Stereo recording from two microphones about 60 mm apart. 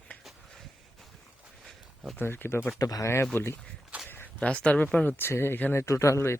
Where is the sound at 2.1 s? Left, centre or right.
Left.